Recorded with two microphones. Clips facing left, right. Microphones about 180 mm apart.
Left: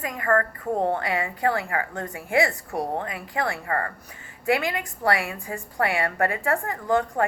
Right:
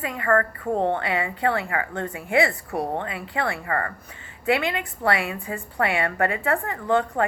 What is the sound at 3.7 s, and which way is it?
Speech, 30° left (ahead or behind).